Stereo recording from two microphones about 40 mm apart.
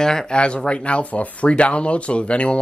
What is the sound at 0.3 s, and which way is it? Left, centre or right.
Speech, left.